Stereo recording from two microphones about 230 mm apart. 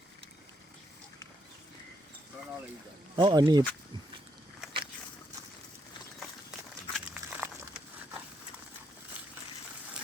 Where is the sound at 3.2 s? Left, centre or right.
Centre.